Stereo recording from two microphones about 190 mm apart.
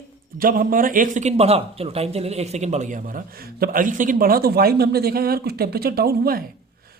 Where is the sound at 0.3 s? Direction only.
50° right (ahead or behind).